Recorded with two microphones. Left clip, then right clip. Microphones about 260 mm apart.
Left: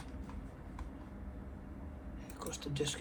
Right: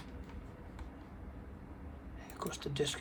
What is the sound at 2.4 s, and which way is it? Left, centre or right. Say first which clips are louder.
Speech: right 2 dB; right.